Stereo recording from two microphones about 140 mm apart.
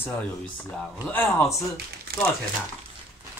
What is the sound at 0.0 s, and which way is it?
Speech, 10° left (ahead or behind).